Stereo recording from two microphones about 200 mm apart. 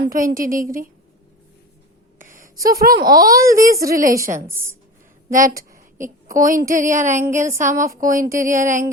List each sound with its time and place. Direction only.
0.0 s a woman's voice: 45° right (ahead or behind)
2.1 s a sound: 40° right (ahead or behind)
2.6 s a woman's voice: 45° right (ahead or behind)
4.4 s speech: 10° right (ahead or behind)
5.3 s a woman's voice: 45° right (ahead or behind)
8.3 s speech: 15° right (ahead or behind)
8.6 s a woman's voice: 40° right (ahead or behind)